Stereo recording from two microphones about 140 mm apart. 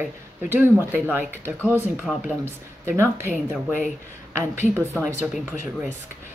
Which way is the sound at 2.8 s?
15° right (ahead or behind).